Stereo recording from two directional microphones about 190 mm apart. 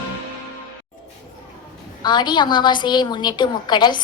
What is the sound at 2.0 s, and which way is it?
A woman's voice, 25° left (ahead or behind).